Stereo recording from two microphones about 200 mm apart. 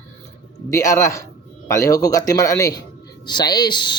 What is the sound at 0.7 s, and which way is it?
Speech, 15° left (ahead or behind).